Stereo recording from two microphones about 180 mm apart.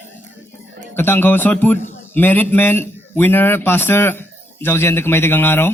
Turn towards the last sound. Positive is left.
turn(degrees=10)  # may be behind; listen again after turning